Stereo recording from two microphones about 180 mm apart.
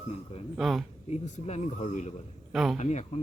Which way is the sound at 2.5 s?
Centre (ahead or behind).